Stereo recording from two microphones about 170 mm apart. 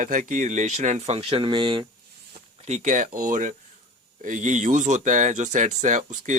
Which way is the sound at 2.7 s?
45° right (ahead or behind).